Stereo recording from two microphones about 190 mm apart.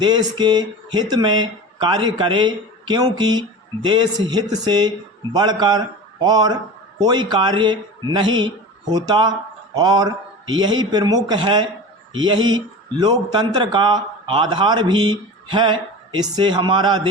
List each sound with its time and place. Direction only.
0.0 s a man's voice: 25° right (ahead or behind)